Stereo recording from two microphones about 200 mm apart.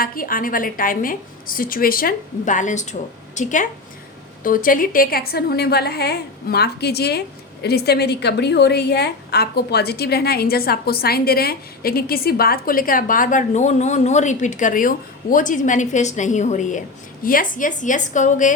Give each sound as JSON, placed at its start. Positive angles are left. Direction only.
{"t": 0.0, "sound": "a woman's voice", "side_deg": 45}